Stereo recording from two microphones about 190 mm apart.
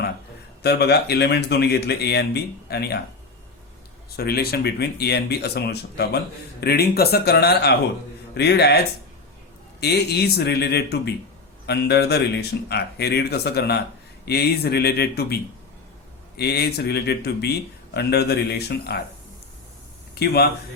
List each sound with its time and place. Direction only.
0.6 s speech: 60° left (ahead or behind)
4.2 s speech: 55° left (ahead or behind)
9.8 s speech: 60° left (ahead or behind)
16.4 s speech: 60° left (ahead or behind)
20.1 s speech: 55° left (ahead or behind)